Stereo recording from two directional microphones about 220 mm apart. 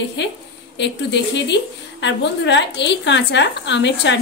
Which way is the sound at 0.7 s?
50° left (ahead or behind).